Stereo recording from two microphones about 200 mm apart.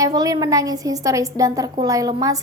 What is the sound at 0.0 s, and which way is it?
A woman's voice, 20° right (ahead or behind).